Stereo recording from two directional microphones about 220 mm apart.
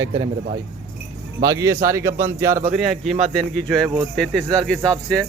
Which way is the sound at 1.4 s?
15° right (ahead or behind).